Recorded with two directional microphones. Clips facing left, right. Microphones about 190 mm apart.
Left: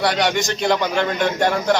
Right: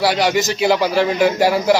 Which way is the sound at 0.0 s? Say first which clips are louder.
Right 3 dB; 5° right (ahead or behind).